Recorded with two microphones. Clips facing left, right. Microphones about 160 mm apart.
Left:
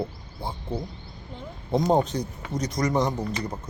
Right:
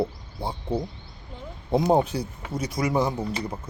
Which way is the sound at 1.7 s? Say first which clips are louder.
Right 1 dB; 10° right (ahead or behind).